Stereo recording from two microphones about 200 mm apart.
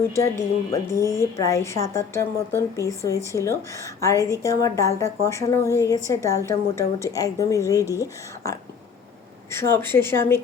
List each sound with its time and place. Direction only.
0.0 s a woman's voice: 15° left (ahead or behind)